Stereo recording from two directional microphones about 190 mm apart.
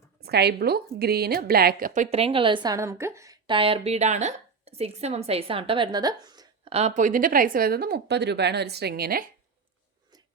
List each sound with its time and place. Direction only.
0.2 s a woman's voice: 60° right (ahead or behind)
2.0 s a woman's voice: 30° right (ahead or behind)
6.7 s speech: 40° right (ahead or behind)